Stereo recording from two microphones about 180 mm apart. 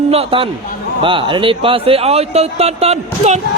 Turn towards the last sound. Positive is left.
turn(degrees=-35)  # may be behind; listen again after turning